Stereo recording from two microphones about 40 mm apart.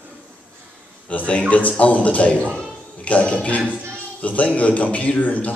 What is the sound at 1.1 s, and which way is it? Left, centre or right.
A man's voice, left.